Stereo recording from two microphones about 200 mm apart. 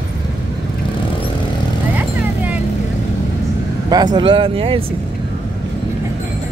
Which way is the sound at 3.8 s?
20° right (ahead or behind).